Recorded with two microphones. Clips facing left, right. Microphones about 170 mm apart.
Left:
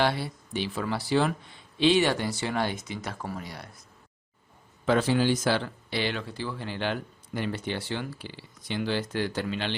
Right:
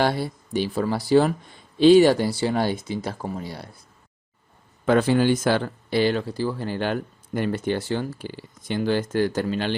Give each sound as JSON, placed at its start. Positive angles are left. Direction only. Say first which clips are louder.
{"t": 0.0, "sound": "speech", "louder": "right 4 dB", "side_deg": -40}
{"t": 4.9, "sound": "speech", "louder": "right 5 dB", "side_deg": -55}